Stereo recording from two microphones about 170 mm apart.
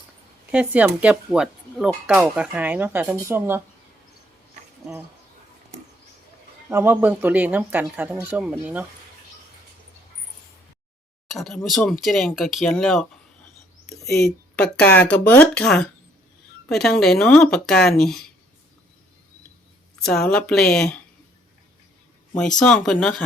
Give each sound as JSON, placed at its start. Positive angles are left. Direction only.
{"t": 0.5, "sound": "speech", "side_deg": -5}
{"t": 5.7, "sound": "a sound", "side_deg": -40}
{"t": 6.7, "sound": "speech", "side_deg": -15}
{"t": 11.3, "sound": "speech", "side_deg": 0}
{"t": 14.3, "sound": "speech", "side_deg": 5}
{"t": 20.0, "sound": "speech", "side_deg": 5}
{"t": 22.4, "sound": "speech", "side_deg": 5}